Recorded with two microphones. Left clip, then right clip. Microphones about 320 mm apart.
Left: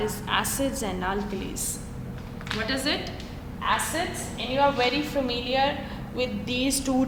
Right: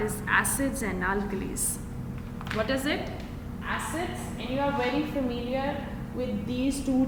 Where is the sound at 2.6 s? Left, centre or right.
Centre.